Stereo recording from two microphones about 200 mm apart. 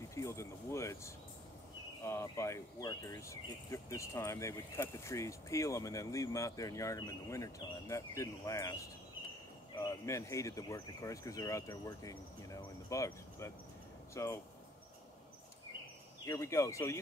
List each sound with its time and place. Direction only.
0.1 s speech: 15° left (ahead or behind)
9.8 s speech: 15° left (ahead or behind)
16.3 s speech: 15° left (ahead or behind)